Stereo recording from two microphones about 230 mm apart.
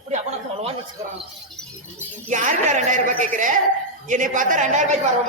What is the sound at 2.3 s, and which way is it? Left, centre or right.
A man's voice, right.